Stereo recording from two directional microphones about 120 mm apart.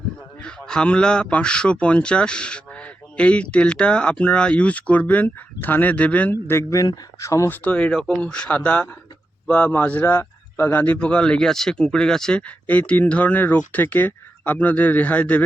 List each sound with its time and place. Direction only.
0.4 s speech: 5° left (ahead or behind)